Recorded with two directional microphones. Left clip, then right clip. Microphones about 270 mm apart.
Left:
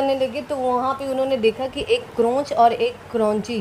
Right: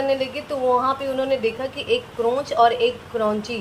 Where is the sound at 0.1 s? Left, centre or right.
Left.